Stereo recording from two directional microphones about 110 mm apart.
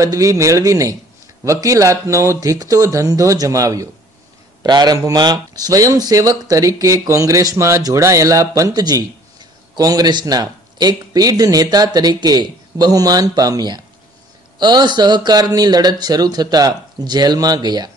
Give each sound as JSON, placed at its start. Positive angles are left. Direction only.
{"t": 0.0, "sound": "speech", "side_deg": -30}